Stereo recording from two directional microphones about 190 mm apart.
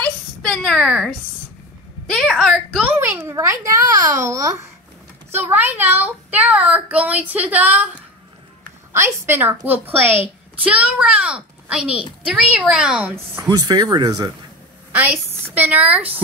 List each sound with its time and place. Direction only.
0.0 s a sound: 5° left (ahead or behind)
2.0 s a woman's voice: centre (ahead or behind)
3.0 s speech: 15° right (ahead or behind)
8.9 s a woman's voice: 15° right (ahead or behind)
13.5 s speech: 20° right (ahead or behind)
14.9 s speech: 10° right (ahead or behind)